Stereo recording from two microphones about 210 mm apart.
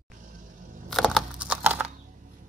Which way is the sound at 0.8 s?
Centre (ahead or behind).